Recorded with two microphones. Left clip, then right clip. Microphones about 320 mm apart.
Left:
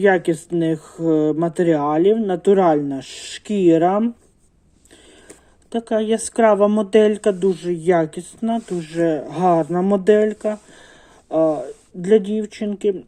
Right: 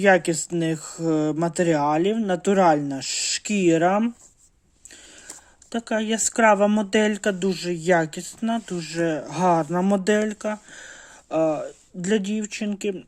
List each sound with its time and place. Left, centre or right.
0.3 s speech: right
5.9 s speech: right